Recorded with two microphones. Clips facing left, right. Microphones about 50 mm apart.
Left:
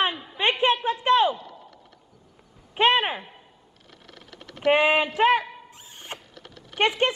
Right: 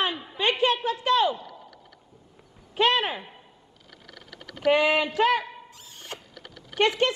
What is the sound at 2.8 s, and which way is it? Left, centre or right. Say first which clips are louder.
Speech: left 2 dB; left.